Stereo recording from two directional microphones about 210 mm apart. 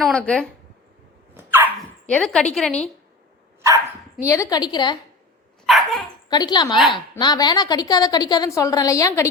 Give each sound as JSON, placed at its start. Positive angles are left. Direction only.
{"t": 0.0, "sound": "speech", "side_deg": 5}
{"t": 1.3, "sound": "dog", "side_deg": -10}
{"t": 2.0, "sound": "speech", "side_deg": 5}
{"t": 4.3, "sound": "a woman's voice", "side_deg": 15}
{"t": 5.6, "sound": "dog", "side_deg": 0}
{"t": 6.2, "sound": "a woman's voice", "side_deg": 20}